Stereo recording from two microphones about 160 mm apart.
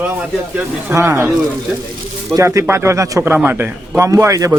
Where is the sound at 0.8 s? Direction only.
15° right (ahead or behind).